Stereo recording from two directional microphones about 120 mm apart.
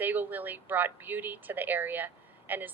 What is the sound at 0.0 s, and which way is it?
Speech, 15° right (ahead or behind).